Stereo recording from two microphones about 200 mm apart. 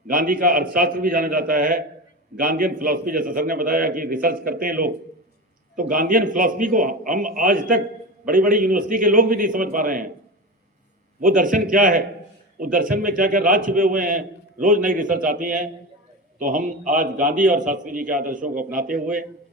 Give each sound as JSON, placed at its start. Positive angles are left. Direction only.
{"t": 0.1, "sound": "a man's voice", "side_deg": -45}
{"t": 11.2, "sound": "a man's voice", "side_deg": -40}